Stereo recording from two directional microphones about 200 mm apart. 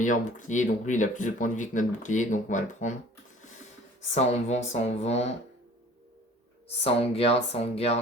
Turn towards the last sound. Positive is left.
turn(degrees=30)  # may be behind; listen again after turning